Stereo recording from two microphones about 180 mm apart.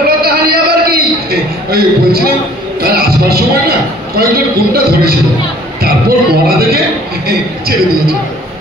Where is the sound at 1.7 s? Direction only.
60° right (ahead or behind).